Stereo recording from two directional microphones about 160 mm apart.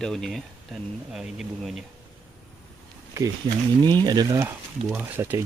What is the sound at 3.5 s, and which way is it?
Speech, 25° right (ahead or behind).